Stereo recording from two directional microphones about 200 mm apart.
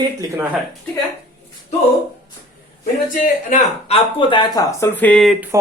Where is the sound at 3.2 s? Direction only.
35° left (ahead or behind); by 5.4 s centre (ahead or behind).